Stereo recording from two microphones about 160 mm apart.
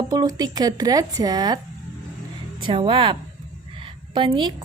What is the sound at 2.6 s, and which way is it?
Speech, 30° right (ahead or behind).